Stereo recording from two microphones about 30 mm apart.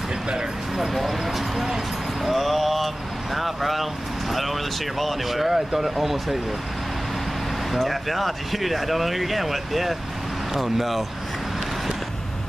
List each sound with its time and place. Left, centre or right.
0.9 s vehicle: centre
2.2 s a sound: centre
3.3 s speech: centre
7.8 s speech: centre